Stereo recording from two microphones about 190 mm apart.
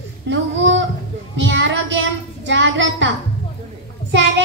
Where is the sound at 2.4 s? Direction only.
70° right (ahead or behind).